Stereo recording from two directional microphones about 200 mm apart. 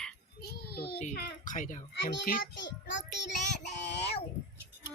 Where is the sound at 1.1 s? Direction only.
45° left (ahead or behind).